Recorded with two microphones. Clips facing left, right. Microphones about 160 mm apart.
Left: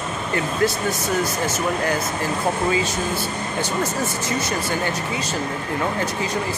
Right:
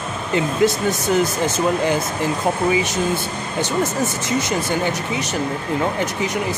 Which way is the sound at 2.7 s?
15° right (ahead or behind).